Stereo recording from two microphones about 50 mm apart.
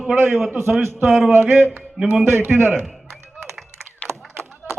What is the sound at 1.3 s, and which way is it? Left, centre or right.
A man's voice, right.